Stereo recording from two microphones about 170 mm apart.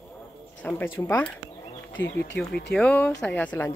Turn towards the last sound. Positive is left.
turn(degrees=10)  # may be behind; listen again after turning